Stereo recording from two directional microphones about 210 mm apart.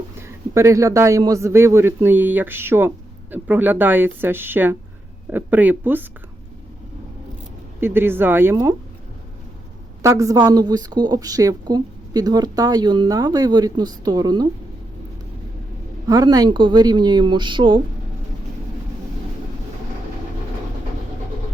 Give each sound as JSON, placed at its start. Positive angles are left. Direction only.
{"t": 0.2, "sound": "a man's voice", "side_deg": -15}
{"t": 7.8, "sound": "a man's voice", "side_deg": -10}
{"t": 10.0, "sound": "speech", "side_deg": -15}
{"t": 16.0, "sound": "speech", "side_deg": -15}